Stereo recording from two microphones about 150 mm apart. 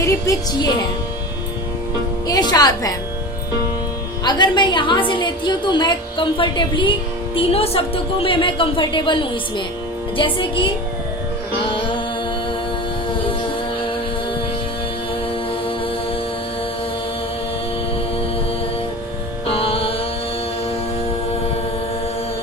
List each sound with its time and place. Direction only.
0.0 s speech: 20° left (ahead or behind)
2.2 s speech: 25° left (ahead or behind)
4.2 s a woman's voice: 30° left (ahead or behind)
11.6 s music: 35° left (ahead or behind)
19.5 s music: 40° left (ahead or behind)